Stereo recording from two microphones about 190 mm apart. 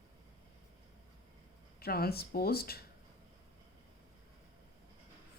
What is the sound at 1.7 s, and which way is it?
Speech, 55° left (ahead or behind).